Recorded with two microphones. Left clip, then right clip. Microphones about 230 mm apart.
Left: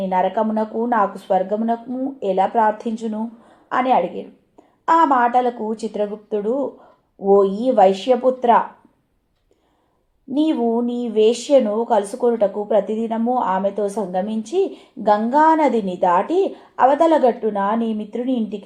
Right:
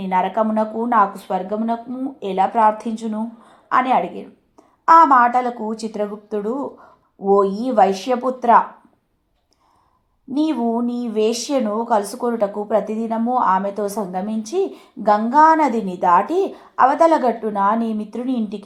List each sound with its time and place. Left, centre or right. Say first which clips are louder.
0.0 s a woman's voice: even; centre
10.5 s speech: left 2 dB; right
10.8 s a woman's voice: left 3 dB; centre
13.1 s speech: right 1 dB; right
13.4 s a woman's voice: right 2 dB; centre